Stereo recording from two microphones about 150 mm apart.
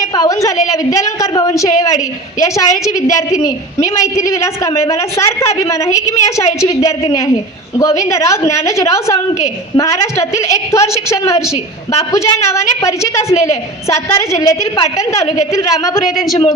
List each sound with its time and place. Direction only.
0.0 s a woman's voice: 25° left (ahead or behind)
16.0 s a woman's voice: centre (ahead or behind)